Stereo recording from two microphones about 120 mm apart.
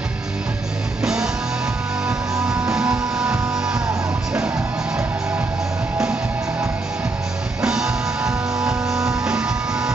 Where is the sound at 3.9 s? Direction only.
30° right (ahead or behind).